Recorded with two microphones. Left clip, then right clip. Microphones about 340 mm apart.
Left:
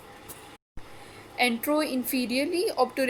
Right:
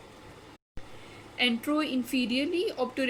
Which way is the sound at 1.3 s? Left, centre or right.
Centre.